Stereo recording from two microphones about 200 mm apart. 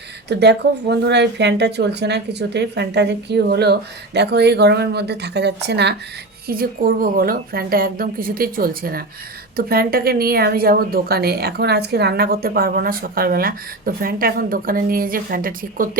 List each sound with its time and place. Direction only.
0.3 s speech: 60° right (ahead or behind)
6.5 s speech: 45° right (ahead or behind)